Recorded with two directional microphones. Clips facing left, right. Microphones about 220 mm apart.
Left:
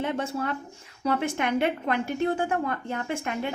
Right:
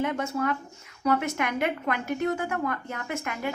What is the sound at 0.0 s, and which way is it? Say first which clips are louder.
A woman's voice: right 1 dB; 30° left (ahead or behind).